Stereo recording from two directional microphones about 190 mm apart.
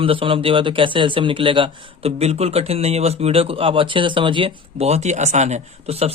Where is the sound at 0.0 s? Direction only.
30° right (ahead or behind).